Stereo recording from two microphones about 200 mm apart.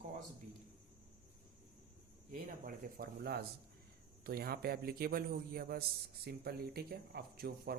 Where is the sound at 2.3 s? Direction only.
45° right (ahead or behind).